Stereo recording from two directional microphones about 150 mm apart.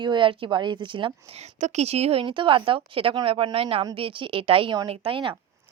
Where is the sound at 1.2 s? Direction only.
45° right (ahead or behind).